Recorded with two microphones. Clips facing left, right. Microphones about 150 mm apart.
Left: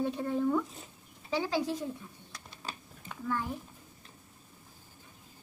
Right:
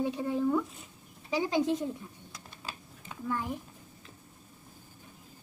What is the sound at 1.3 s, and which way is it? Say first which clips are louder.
Speech: right 3 dB; 15° right (ahead or behind).